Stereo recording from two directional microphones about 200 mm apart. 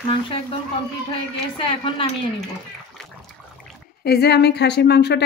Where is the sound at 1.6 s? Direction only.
25° left (ahead or behind).